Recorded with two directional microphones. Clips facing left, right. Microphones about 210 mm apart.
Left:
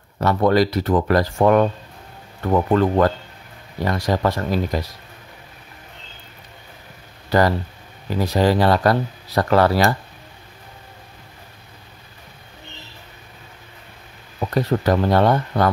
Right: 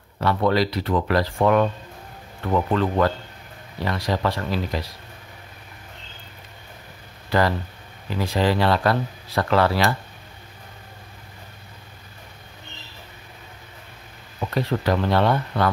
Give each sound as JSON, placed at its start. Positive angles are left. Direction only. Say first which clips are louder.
{"t": 0.2, "sound": "speech", "louder": "left 4 dB", "side_deg": 45}
{"t": 7.2, "sound": "speech", "louder": "left 4 dB", "side_deg": 40}
{"t": 14.5, "sound": "speech", "louder": "left 4 dB", "side_deg": 45}